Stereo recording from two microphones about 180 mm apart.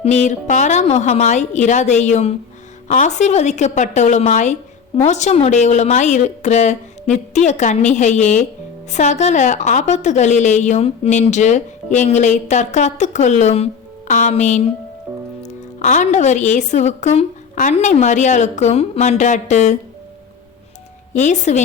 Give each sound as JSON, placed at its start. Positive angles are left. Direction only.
{"t": 0.0, "sound": "a woman's voice", "side_deg": 40}
{"t": 21.1, "sound": "a woman's voice", "side_deg": 40}